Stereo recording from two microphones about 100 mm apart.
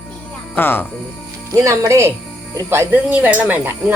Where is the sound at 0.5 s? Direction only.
20° left (ahead or behind).